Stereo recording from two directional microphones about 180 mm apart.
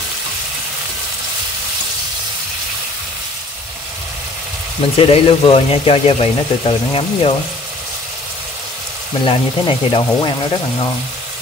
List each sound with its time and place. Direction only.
4.9 s speech: 30° left (ahead or behind)
9.2 s speech: 25° left (ahead or behind)